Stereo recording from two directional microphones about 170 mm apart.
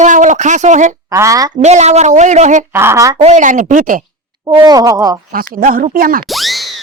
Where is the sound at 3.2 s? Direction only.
45° right (ahead or behind).